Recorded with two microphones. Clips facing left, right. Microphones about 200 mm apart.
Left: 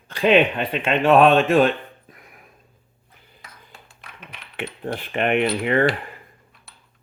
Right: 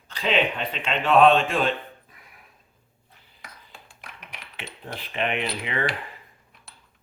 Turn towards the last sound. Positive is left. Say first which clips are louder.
# left 9 dB
turn(degrees=50)  # may be behind; listen again after turning